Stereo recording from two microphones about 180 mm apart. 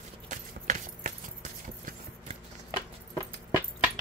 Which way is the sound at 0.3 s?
45° right (ahead or behind).